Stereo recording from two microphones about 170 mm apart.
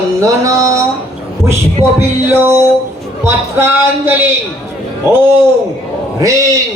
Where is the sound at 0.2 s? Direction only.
20° right (ahead or behind).